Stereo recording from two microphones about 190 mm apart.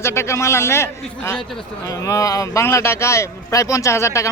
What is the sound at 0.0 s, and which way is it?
A man's voice, 15° left (ahead or behind).